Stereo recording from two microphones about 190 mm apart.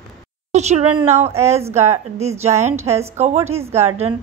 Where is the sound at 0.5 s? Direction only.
35° right (ahead or behind).